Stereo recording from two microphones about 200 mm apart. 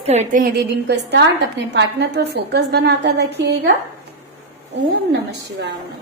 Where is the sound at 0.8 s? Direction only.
60° right (ahead or behind).